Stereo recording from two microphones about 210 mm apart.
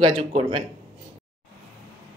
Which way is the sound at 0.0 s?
25° right (ahead or behind).